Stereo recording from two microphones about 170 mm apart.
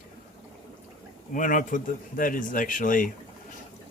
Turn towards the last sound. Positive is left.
turn(degrees=50)  # may be behind; listen again after turning